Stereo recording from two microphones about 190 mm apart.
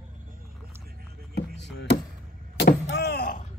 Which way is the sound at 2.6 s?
60° left (ahead or behind).